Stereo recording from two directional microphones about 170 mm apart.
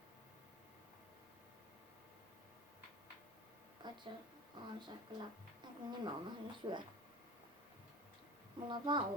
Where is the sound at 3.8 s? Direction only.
25° right (ahead or behind).